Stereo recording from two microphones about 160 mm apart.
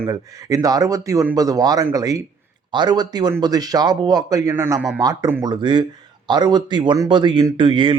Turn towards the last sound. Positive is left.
turn(degrees=-30)  # may be behind; listen again after turning